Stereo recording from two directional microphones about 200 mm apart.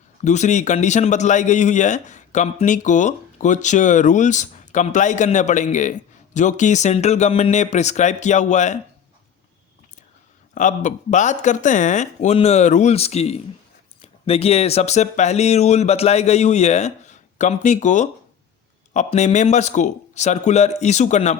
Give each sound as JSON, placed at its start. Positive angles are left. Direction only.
{"t": 0.3, "sound": "a man's voice", "side_deg": 35}
{"t": 10.5, "sound": "a man's voice", "side_deg": 40}